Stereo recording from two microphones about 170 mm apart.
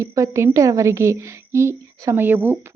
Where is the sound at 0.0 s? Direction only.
15° right (ahead or behind).